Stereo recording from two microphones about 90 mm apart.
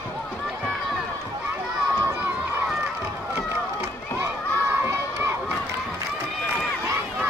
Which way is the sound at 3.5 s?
30° right (ahead or behind).